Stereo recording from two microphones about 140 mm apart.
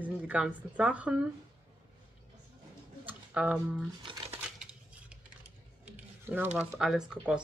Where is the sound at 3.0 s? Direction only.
10° right (ahead or behind).